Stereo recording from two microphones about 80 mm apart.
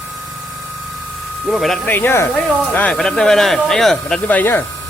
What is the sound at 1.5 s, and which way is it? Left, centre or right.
Speech, centre.